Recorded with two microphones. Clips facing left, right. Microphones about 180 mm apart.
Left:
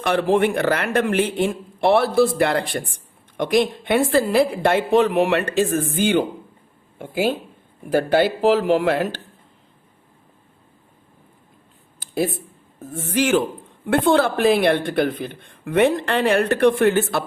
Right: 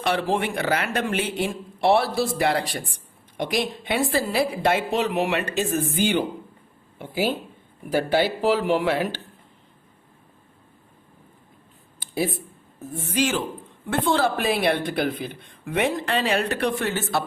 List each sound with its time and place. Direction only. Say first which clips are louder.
0.0 s speech: left 6 dB; 55° left (ahead or behind)
11.9 s a sound: left 3 dB; 50° left (ahead or behind)
12.8 s speech: left 3 dB; 50° left (ahead or behind)